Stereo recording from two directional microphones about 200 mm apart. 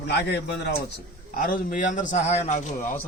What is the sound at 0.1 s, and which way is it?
Speech, 60° left (ahead or behind).